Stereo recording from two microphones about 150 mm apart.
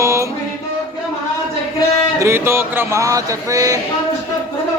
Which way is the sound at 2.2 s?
20° right (ahead or behind).